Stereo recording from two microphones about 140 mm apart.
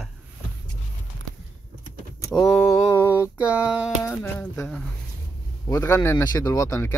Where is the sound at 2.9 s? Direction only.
15° right (ahead or behind).